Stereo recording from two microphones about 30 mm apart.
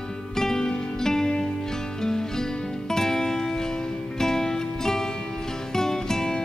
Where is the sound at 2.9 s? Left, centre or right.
Centre.